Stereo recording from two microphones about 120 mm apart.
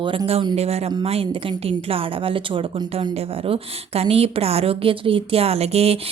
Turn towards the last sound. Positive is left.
turn(degrees=-60)  # may be behind; listen again after turning